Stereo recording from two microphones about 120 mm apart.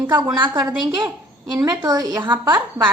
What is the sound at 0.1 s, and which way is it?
A woman's voice, 40° right (ahead or behind).